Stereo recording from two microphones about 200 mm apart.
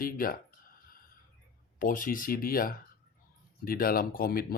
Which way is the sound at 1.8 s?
40° left (ahead or behind).